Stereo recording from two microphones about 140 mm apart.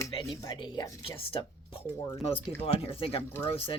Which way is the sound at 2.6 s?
40° left (ahead or behind).